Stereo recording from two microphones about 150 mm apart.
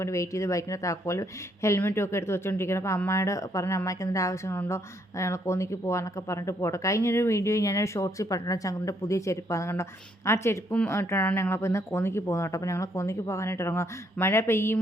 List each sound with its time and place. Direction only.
0.0 s speech: 20° left (ahead or behind)